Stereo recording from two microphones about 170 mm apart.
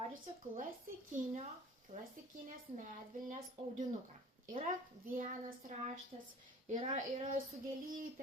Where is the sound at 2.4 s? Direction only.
50° right (ahead or behind).